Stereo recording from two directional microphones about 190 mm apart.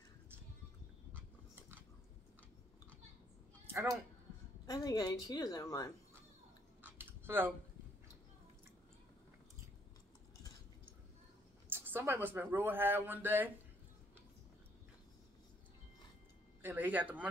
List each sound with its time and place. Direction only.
1.1 s biting: 10° right (ahead or behind)
4.6 s a woman's voice: 20° left (ahead or behind)
6.8 s chewing: 10° right (ahead or behind)
11.7 s speech: 10° right (ahead or behind)
16.6 s speech: 10° right (ahead or behind)